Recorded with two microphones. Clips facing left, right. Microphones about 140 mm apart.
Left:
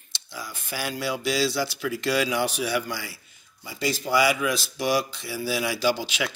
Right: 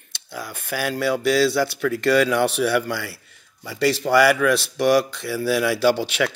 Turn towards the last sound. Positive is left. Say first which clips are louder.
# right 6 dB
turn(degrees=-65)  # may be behind; listen again after turning